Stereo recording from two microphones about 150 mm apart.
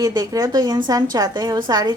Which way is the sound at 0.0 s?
25° right (ahead or behind).